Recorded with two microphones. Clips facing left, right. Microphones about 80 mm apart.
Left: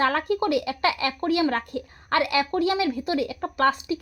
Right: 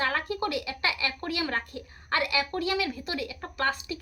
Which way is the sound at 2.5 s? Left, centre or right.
Left.